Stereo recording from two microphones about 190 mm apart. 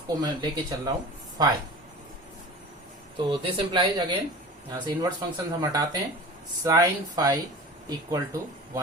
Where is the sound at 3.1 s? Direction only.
25° right (ahead or behind).